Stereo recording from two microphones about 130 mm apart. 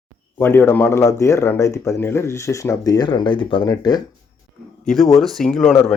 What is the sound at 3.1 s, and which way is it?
Speech, 40° left (ahead or behind).